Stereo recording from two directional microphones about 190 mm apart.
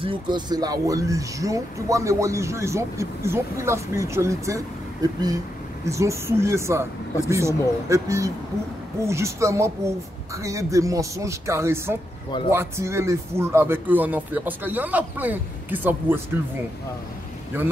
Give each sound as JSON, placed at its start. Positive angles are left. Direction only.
{"t": 0.0, "sound": "speech", "side_deg": -25}
{"t": 5.9, "sound": "speech", "side_deg": -15}